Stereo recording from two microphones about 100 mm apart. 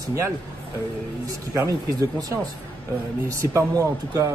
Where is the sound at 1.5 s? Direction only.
30° right (ahead or behind).